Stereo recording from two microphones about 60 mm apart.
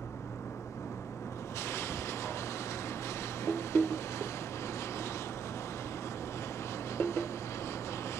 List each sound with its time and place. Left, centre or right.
1.6 s vehicle: left
3.4 s music: left
7.0 s vehicle: left